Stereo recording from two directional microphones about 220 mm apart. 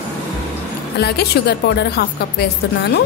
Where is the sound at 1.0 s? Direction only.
45° left (ahead or behind).